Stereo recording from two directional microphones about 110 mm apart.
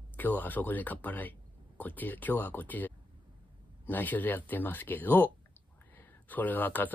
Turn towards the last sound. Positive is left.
turn(degrees=15)  # may be behind; listen again after turning